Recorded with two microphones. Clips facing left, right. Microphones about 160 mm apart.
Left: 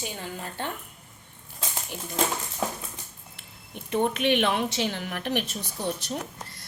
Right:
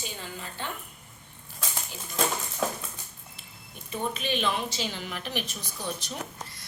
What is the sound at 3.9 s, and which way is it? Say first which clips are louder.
A woman's voice: left 7 dB; 70° left (ahead or behind).